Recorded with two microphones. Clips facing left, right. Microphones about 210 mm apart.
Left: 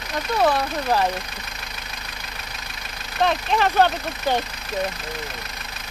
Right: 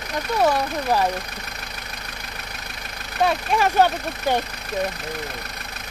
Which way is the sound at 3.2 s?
10° right (ahead or behind).